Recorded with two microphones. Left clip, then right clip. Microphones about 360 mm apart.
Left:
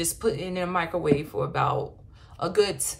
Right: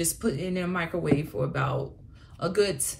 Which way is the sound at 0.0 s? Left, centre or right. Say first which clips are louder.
Left 3 dB; centre.